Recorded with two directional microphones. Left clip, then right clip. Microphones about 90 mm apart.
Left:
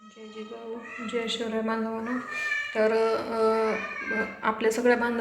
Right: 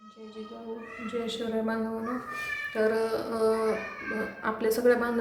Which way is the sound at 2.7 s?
40° right (ahead or behind).